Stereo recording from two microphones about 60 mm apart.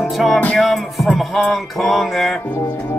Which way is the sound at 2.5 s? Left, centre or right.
Left.